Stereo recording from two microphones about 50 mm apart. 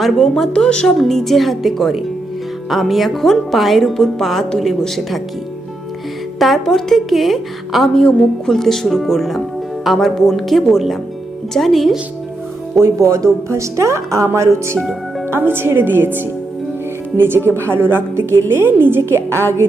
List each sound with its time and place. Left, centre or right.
0.0 s a woman's voice: centre
6.4 s a woman's voice: centre
12.8 s a woman's voice: right
14.3 s speech: right
15.3 s a woman's voice: right